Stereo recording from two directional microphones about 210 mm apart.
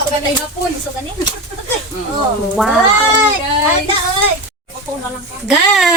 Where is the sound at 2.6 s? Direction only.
Centre (ahead or behind).